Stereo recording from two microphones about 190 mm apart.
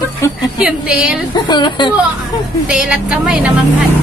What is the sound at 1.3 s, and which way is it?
Speech, 25° left (ahead or behind).